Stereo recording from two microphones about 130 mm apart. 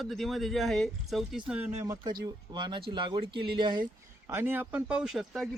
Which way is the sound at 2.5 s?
35° right (ahead or behind).